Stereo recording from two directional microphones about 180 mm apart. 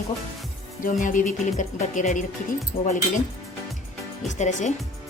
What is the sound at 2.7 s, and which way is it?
Speech, 55° left (ahead or behind).